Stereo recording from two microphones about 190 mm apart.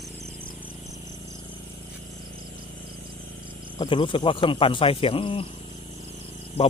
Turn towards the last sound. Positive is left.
turn(degrees=35)  # may be behind; listen again after turning